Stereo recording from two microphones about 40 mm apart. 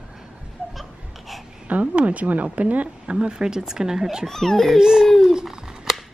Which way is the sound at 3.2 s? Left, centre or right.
Centre.